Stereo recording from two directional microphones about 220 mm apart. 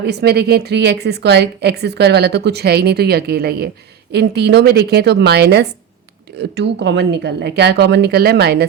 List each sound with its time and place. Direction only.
0.0 s a woman's voice: 50° right (ahead or behind)